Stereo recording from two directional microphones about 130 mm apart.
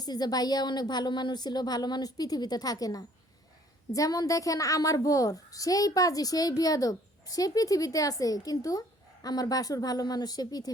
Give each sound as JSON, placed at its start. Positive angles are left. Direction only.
{"t": 0.0, "sound": "a woman's voice", "side_deg": 30}